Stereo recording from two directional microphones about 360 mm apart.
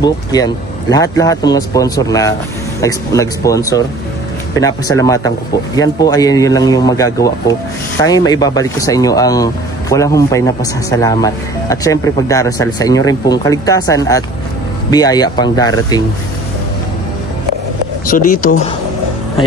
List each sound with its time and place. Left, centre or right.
0.0 s speech: centre
18.0 s speech: left